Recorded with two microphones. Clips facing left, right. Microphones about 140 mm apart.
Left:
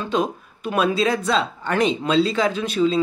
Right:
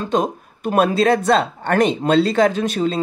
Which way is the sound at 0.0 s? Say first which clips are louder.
Right 3 dB; 45° right (ahead or behind).